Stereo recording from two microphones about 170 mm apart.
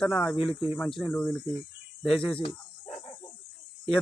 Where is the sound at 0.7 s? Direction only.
5° left (ahead or behind).